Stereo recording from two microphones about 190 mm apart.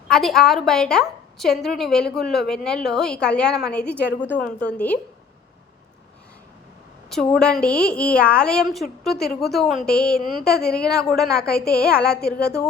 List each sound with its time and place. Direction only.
0.1 s a woman's voice: centre (ahead or behind)
7.3 s a woman's voice: 5° left (ahead or behind)
11.3 s a woman's voice: 55° left (ahead or behind)